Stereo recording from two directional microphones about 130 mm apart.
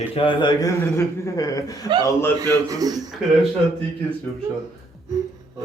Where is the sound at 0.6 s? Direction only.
25° left (ahead or behind).